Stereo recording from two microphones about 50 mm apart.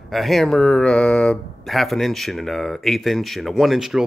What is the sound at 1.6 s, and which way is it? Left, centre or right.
Speech, centre.